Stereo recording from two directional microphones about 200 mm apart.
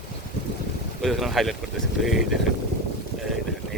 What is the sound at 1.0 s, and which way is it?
Speech, centre (ahead or behind).